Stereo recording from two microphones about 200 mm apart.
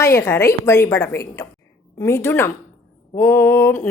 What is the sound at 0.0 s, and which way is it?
A woman's voice, 15° left (ahead or behind).